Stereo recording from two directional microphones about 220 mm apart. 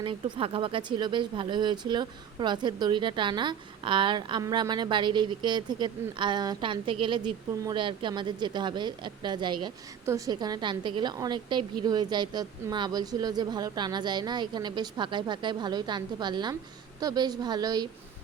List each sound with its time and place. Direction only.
0.0 s speech: 25° right (ahead or behind)